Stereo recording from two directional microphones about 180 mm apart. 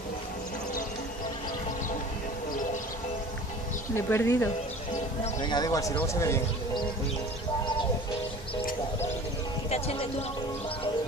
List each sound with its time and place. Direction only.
3.9 s speech: 15° left (ahead or behind)
5.4 s speech: 25° left (ahead or behind)
9.7 s a sound: 35° left (ahead or behind)